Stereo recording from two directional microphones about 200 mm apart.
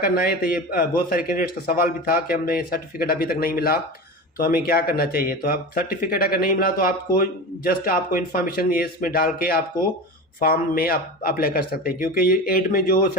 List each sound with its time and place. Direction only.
0.0 s speech: 45° left (ahead or behind)